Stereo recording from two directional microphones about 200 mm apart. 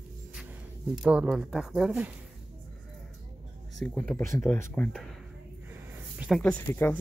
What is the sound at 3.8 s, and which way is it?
Speech, 5° left (ahead or behind).